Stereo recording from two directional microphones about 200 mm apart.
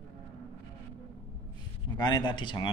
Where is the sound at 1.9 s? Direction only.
20° left (ahead or behind).